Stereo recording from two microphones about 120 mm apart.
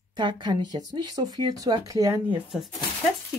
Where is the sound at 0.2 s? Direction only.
40° right (ahead or behind).